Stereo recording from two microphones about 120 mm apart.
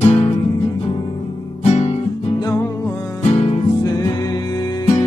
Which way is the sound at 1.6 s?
65° left (ahead or behind).